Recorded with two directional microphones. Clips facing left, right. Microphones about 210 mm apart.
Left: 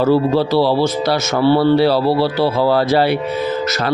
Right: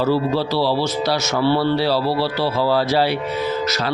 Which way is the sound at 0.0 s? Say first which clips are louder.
Left 5 dB; 55° left (ahead or behind).